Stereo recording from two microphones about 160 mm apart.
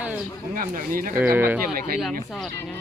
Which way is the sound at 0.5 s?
60° right (ahead or behind).